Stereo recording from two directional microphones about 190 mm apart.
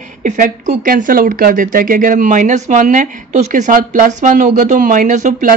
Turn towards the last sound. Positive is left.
turn(degrees=-40)  # may be behind; listen again after turning